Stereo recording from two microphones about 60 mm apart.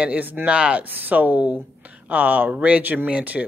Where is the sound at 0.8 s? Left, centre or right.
Right.